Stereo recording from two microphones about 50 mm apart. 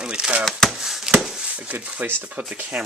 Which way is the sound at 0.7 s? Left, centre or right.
Centre.